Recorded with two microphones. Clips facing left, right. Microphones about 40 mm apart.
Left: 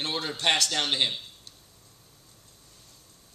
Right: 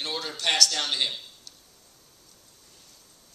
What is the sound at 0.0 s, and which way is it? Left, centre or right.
A man's voice, left.